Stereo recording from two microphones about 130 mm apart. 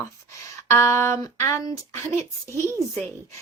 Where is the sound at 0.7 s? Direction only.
20° left (ahead or behind).